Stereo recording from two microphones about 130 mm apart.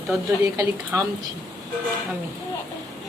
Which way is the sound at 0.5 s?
25° right (ahead or behind).